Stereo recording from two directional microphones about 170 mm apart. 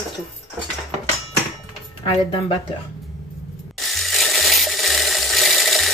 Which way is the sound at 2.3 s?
30° left (ahead or behind).